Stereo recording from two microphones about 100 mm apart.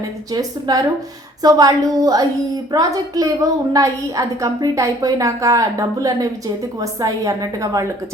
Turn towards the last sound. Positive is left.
turn(degrees=-35)  # may be behind; listen again after turning